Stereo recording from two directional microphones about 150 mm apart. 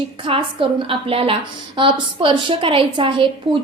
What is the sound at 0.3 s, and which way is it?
A woman's voice, 35° right (ahead or behind).